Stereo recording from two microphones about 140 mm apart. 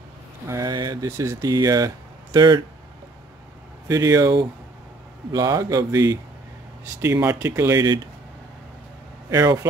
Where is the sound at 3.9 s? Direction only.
20° right (ahead or behind).